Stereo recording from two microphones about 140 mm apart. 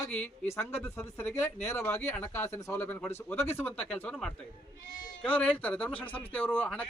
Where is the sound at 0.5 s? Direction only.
15° left (ahead or behind).